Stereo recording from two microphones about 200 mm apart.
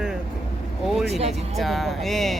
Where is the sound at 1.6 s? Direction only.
Centre (ahead or behind).